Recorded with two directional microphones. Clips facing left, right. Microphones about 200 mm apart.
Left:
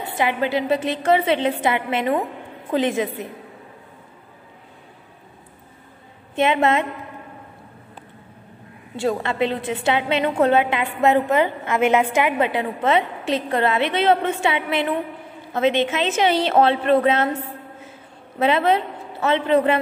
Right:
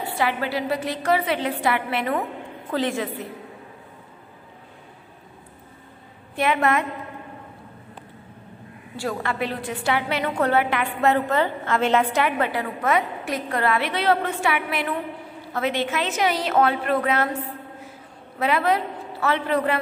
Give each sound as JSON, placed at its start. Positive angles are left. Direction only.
{"t": 0.0, "sound": "a woman's voice", "side_deg": 20}
{"t": 6.3, "sound": "a woman's voice", "side_deg": 20}
{"t": 8.9, "sound": "a woman's voice", "side_deg": 25}
{"t": 18.4, "sound": "a woman's voice", "side_deg": 25}